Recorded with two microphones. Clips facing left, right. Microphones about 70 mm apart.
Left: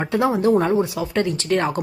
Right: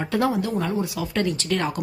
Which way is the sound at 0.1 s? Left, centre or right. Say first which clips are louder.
Left 2 dB; centre.